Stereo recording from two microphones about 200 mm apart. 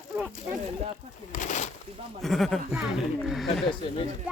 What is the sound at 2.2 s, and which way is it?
Speech, centre (ahead or behind).